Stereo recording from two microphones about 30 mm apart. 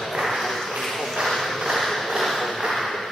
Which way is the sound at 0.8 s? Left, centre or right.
Centre.